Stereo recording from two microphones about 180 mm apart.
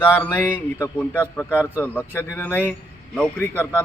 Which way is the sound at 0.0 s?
10° left (ahead or behind).